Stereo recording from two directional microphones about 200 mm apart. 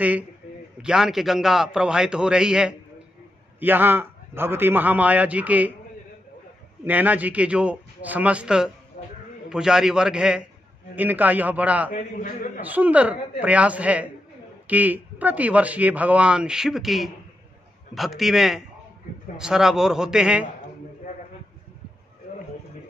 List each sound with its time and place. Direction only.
0.8 s a man's voice: 5° right (ahead or behind)
6.8 s speech: 10° right (ahead or behind)
9.0 s a sound: 30° left (ahead or behind)
9.5 s a man's voice: 5° right (ahead or behind)
11.9 s a man's voice: 40° left (ahead or behind)
12.6 s a man's voice: 10° right (ahead or behind)